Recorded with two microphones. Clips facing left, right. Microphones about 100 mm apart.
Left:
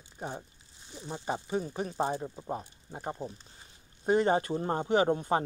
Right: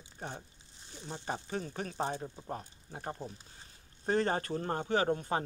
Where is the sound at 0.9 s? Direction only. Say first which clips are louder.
Left 4 dB; 10° left (ahead or behind).